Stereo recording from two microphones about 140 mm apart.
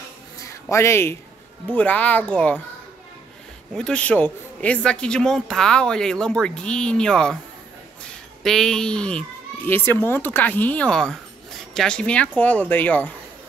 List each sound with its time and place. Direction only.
0.4 s a sound: 20° left (ahead or behind)
1.7 s a child's voice: 10° left (ahead or behind)
3.7 s a man's voice: 5° left (ahead or behind)